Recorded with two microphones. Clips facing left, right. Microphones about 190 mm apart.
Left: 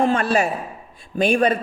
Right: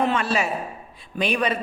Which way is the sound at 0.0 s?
50° left (ahead or behind).